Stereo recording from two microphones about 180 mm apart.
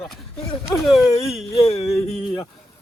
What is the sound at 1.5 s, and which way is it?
Speech, 30° left (ahead or behind).